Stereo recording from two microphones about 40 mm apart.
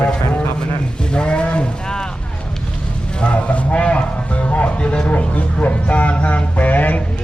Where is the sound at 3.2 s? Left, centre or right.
Left.